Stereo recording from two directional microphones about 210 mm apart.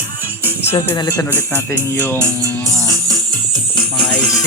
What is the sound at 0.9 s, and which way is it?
Speech, 15° left (ahead or behind).